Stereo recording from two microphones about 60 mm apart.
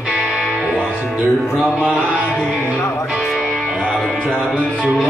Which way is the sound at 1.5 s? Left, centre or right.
Centre.